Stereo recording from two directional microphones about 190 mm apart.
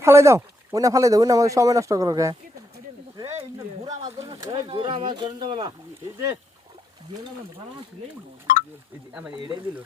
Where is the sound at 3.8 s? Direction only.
20° right (ahead or behind).